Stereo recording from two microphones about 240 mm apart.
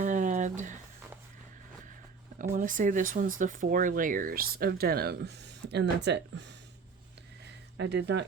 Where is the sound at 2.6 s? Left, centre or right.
Right.